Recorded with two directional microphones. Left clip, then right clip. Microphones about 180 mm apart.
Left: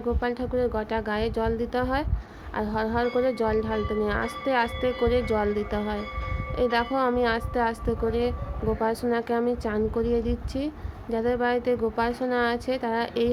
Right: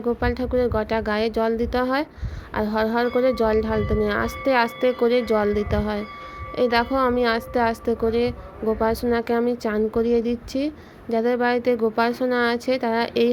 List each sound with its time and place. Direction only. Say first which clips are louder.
0.2 s a woman's voice: right 4 dB; 20° right (ahead or behind)